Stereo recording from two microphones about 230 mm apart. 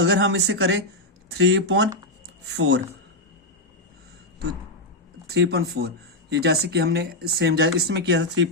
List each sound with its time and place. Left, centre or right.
0.0 s speech: right
5.3 s speech: right